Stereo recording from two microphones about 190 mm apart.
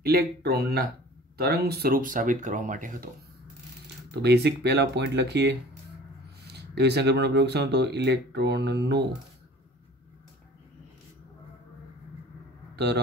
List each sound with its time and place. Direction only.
0.0 s speech: 55° right (ahead or behind)
4.1 s speech: 60° right (ahead or behind)
12.7 s speech: 60° right (ahead or behind)